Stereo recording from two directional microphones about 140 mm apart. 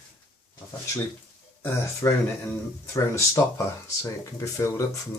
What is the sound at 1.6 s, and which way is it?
Speech, 20° left (ahead or behind).